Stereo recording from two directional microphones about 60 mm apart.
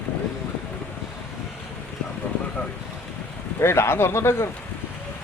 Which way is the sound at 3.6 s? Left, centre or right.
Left.